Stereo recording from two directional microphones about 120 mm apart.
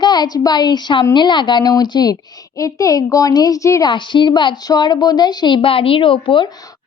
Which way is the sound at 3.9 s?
40° left (ahead or behind).